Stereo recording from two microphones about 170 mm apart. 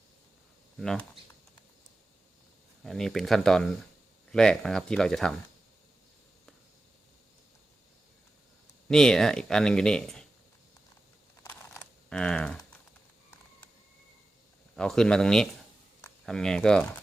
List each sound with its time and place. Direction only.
0.8 s speech: 5° left (ahead or behind)
2.8 s speech: centre (ahead or behind)
8.9 s speech: 5° left (ahead or behind)
11.4 s typing: 10° left (ahead or behind)
14.8 s speech: 5° left (ahead or behind)